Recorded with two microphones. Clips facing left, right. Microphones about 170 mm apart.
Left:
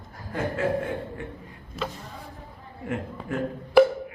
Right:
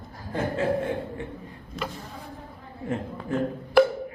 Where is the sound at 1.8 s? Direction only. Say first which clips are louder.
Left 1 dB; 5° left (ahead or behind).